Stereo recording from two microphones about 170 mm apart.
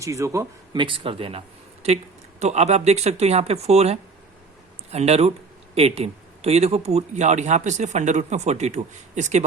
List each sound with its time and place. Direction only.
0.0 s a man's voice: 20° right (ahead or behind); by 9.4 s 45° right (ahead or behind)